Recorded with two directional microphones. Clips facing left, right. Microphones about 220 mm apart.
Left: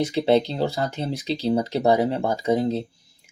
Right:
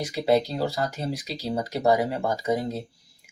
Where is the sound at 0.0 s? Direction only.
25° left (ahead or behind).